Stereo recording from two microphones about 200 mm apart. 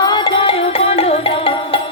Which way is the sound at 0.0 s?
25° left (ahead or behind).